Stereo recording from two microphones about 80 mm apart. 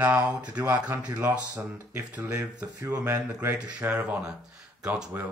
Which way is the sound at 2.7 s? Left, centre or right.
Right.